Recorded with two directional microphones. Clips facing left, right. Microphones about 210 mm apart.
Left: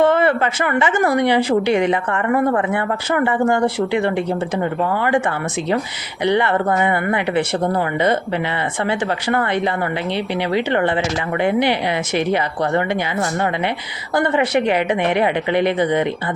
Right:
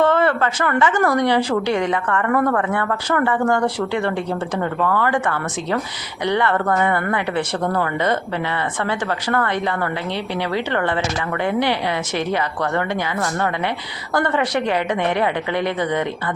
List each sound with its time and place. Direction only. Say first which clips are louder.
0.0 s speech: left 2 dB; 15° left (ahead or behind)